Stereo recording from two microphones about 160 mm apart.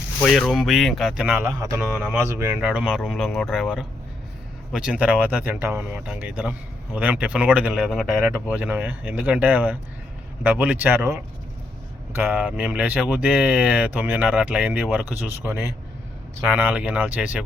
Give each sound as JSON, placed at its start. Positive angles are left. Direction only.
{"t": 0.2, "sound": "speech", "side_deg": 5}
{"t": 12.2, "sound": "speech", "side_deg": -10}
{"t": 16.6, "sound": "speech", "side_deg": -10}